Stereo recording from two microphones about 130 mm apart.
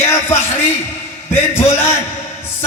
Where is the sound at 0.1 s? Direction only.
20° left (ahead or behind).